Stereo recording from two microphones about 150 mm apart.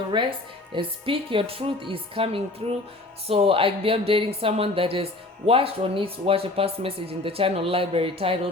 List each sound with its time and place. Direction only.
0.1 s speech: 35° right (ahead or behind)